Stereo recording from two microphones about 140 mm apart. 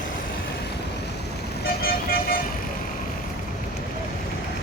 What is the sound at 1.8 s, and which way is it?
Vehicle, 90° left.